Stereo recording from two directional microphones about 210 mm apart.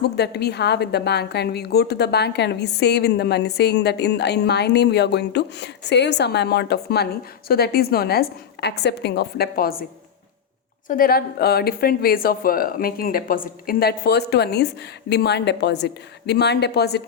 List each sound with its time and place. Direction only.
0.0 s a woman's voice: 50° left (ahead or behind)
10.8 s a woman's voice: 40° left (ahead or behind)